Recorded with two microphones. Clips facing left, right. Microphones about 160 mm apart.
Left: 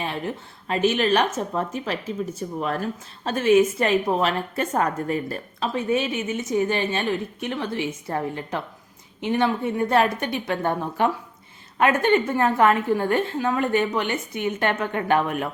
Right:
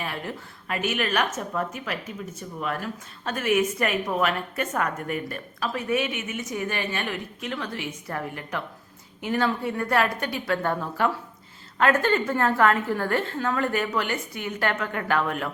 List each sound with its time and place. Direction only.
0.0 s a woman's voice: 25° left (ahead or behind)